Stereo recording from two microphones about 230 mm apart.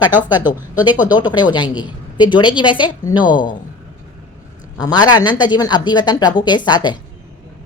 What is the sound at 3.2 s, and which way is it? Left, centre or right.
Speech, left.